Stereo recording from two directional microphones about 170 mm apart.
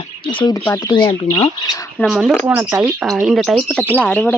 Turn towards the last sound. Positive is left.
turn(degrees=5)  # may be behind; listen again after turning